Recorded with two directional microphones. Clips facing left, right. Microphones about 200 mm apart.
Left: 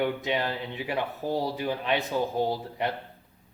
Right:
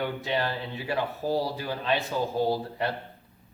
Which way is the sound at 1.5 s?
20° left (ahead or behind).